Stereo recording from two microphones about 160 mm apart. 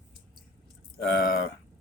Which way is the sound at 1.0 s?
85° left.